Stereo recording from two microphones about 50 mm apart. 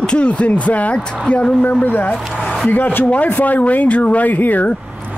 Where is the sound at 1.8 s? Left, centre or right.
Left.